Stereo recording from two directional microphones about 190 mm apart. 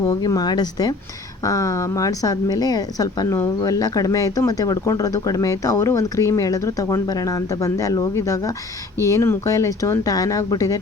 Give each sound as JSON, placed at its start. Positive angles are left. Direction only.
{"t": 0.1, "sound": "a woman's voice", "side_deg": 20}